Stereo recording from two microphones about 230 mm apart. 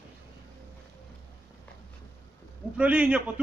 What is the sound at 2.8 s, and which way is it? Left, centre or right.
Speech, centre.